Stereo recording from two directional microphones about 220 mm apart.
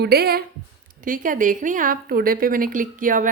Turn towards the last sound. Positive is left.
turn(degrees=-40)  # may be behind; listen again after turning